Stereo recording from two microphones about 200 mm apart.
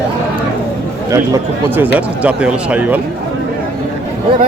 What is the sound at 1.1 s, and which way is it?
Speech, 10° right (ahead or behind).